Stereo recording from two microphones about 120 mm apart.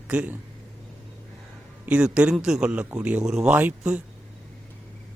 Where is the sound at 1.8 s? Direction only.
10° right (ahead or behind).